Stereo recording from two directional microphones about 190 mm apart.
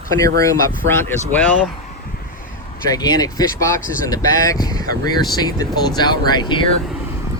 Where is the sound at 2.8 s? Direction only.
20° left (ahead or behind).